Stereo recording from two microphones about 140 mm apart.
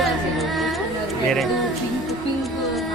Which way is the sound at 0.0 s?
Centre (ahead or behind).